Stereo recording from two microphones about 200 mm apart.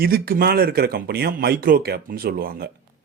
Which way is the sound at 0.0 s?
50° right (ahead or behind).